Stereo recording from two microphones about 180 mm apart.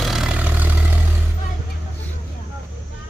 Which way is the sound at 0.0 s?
Centre (ahead or behind).